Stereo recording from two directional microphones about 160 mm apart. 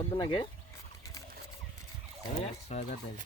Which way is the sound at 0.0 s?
30° left (ahead or behind).